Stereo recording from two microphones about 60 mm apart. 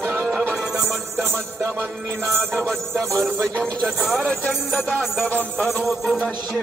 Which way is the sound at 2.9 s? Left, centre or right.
Right.